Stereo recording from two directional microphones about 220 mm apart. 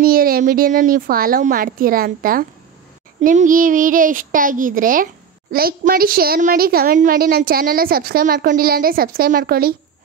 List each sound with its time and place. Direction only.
0.0 s a child's voice: 40° right (ahead or behind)